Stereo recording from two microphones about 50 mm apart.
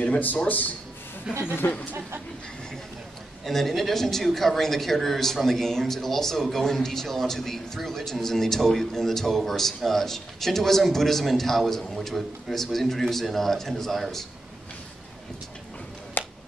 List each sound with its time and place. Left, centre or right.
0.5 s speech: left
1.3 s speech: centre
1.6 s speech: left
3.4 s a woman's voice: centre
16.2 s a sound: left